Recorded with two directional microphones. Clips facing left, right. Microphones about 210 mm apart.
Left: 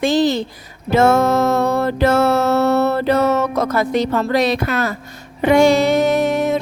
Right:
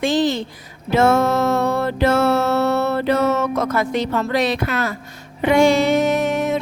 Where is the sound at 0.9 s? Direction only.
45° left (ahead or behind).